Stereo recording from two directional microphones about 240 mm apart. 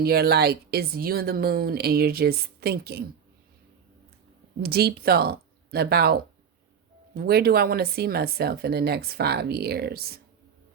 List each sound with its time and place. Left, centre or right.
0.0 s speech: right
4.6 s speech: right